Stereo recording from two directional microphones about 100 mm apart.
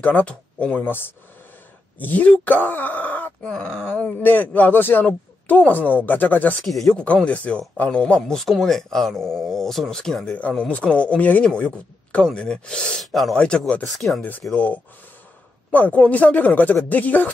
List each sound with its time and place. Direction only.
0.0 s speech: 15° left (ahead or behind)
6.6 s speech: centre (ahead or behind)
14.5 s speech: 15° left (ahead or behind)